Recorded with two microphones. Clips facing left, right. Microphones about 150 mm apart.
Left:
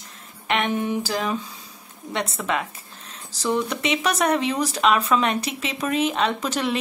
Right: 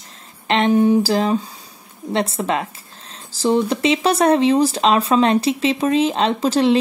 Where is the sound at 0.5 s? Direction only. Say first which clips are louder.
Right 9 dB; 30° right (ahead or behind).